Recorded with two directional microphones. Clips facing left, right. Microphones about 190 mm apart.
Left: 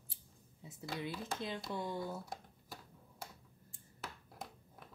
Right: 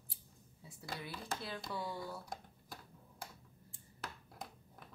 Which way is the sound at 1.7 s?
20° left (ahead or behind).